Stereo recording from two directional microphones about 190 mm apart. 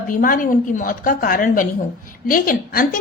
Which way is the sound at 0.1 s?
45° left (ahead or behind).